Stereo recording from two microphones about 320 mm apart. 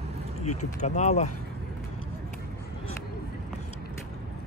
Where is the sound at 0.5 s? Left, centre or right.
Left.